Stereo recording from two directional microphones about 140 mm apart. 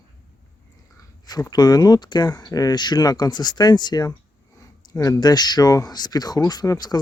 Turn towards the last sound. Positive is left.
turn(degrees=25)  # may be behind; listen again after turning